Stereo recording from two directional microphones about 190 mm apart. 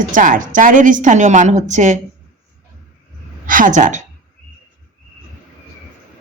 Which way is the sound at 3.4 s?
45° right (ahead or behind).